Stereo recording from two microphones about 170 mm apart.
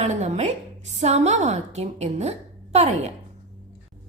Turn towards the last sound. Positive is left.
turn(degrees=-40)  # may be behind; listen again after turning